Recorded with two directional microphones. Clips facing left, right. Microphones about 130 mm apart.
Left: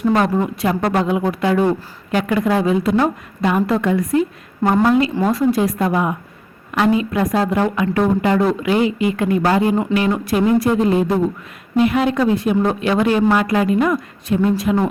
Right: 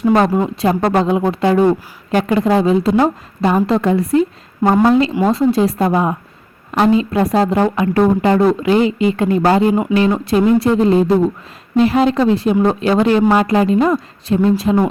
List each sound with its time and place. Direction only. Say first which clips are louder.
0.0 s a woman's voice: right 3 dB; 25° right (ahead or behind)